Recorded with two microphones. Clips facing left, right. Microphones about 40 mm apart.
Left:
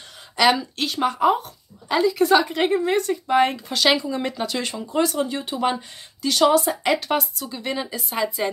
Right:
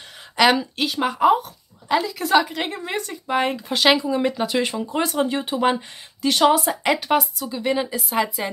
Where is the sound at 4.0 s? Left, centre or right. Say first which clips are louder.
Right 4 dB; centre.